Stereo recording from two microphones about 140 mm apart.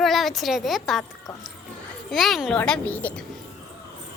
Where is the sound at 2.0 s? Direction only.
Centre (ahead or behind).